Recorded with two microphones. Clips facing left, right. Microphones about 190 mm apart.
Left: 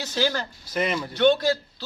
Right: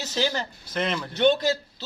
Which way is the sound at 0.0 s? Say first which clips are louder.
Left 1 dB; 20° right (ahead or behind).